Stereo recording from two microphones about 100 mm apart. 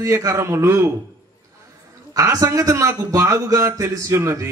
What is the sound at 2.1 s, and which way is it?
A man's voice, 30° right (ahead or behind).